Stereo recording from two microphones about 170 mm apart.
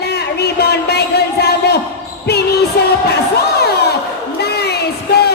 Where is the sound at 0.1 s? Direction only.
70° left (ahead or behind).